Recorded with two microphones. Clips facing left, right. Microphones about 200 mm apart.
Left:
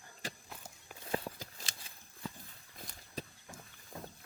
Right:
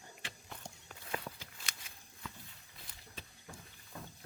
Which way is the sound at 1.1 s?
35° left (ahead or behind).